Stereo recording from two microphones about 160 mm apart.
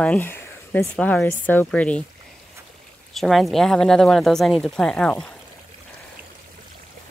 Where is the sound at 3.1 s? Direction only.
Centre (ahead or behind).